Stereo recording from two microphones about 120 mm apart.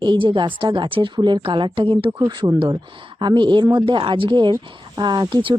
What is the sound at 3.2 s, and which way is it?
Speech, 40° right (ahead or behind).